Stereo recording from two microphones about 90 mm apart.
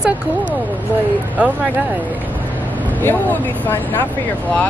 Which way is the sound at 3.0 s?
20° left (ahead or behind).